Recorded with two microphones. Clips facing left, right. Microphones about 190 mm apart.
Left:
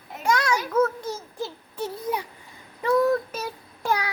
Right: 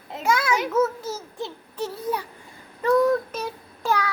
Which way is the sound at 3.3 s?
10° left (ahead or behind).